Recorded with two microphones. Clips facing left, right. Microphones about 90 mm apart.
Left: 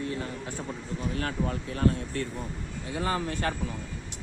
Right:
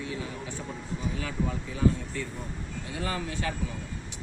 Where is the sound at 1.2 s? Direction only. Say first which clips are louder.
Left 2 dB; 60° left (ahead or behind).